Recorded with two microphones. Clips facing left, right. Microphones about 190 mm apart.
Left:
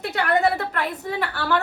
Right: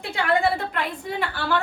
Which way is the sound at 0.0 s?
70° left (ahead or behind).